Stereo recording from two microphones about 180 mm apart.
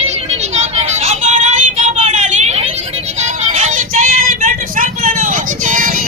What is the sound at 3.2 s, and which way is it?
Vehicle, 40° right (ahead or behind).